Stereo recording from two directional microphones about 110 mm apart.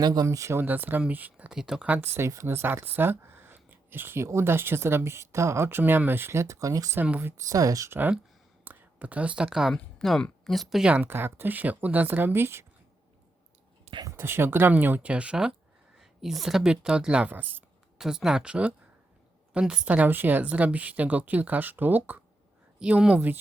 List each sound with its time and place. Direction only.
0.0 s speech: 35° right (ahead or behind); by 2.0 s 10° right (ahead or behind)
2.1 s speech: 25° right (ahead or behind)
7.0 s speech: 20° right (ahead or behind)
7.5 s speech: 30° right (ahead or behind)
7.9 s speech: 15° right (ahead or behind)
14.1 s speech: 20° right (ahead or behind)
18.0 s speech: 5° right (ahead or behind)